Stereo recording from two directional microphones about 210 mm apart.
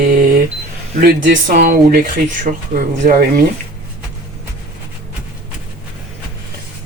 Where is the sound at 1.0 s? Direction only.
40° right (ahead or behind).